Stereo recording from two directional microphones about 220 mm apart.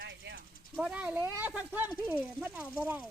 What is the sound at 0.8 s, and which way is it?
Speech, 5° right (ahead or behind).